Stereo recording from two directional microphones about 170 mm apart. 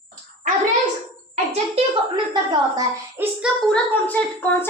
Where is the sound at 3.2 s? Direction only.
10° right (ahead or behind).